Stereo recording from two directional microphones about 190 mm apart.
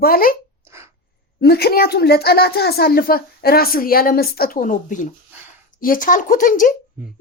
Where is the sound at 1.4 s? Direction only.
55° left (ahead or behind).